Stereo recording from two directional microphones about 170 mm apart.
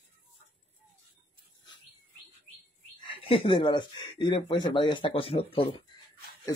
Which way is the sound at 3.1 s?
30° left (ahead or behind).